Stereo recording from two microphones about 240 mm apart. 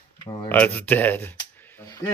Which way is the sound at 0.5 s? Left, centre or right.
Centre.